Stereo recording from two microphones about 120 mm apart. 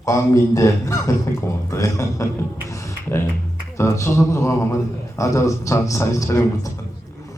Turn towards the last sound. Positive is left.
turn(degrees=25)  # may be behind; listen again after turning